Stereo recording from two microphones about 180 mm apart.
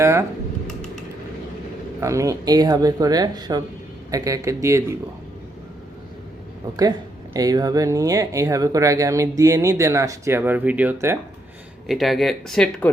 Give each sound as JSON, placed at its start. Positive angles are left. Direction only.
{"t": 0.0, "sound": "speech", "side_deg": -15}
{"t": 2.0, "sound": "speech", "side_deg": -15}
{"t": 7.3, "sound": "speech", "side_deg": -20}
{"t": 11.9, "sound": "speech", "side_deg": 0}